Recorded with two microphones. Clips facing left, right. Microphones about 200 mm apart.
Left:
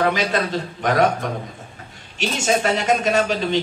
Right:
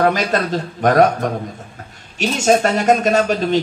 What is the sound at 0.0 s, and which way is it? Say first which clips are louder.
A woman's voice: right 3 dB; 45° right (ahead or behind).